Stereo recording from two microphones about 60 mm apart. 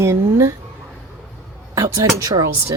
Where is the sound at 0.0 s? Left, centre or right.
Right.